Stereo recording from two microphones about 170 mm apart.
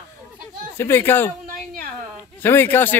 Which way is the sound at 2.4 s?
10° left (ahead or behind).